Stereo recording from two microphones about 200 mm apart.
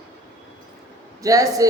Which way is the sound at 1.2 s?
15° right (ahead or behind).